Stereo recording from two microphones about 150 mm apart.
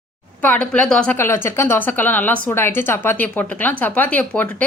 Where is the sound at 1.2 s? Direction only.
15° left (ahead or behind).